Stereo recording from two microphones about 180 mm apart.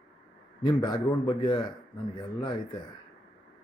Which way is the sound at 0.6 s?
25° left (ahead or behind).